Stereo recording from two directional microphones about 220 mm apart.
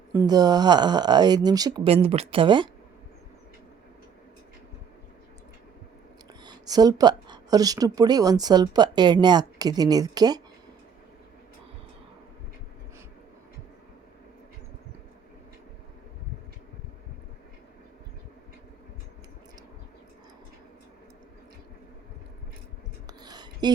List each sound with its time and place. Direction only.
0.1 s speech: 15° right (ahead or behind)
6.4 s speech: 20° right (ahead or behind)
23.0 s a sound: 20° right (ahead or behind)